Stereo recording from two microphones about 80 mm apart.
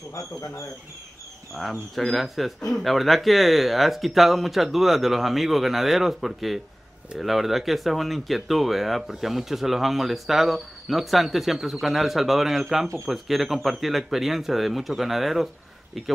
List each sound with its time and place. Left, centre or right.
0.1 s speech: left
1.5 s speech: centre